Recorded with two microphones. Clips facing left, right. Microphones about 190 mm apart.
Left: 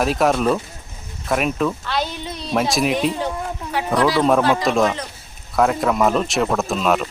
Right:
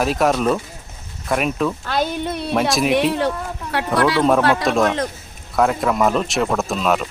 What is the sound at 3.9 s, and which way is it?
Speech, centre (ahead or behind).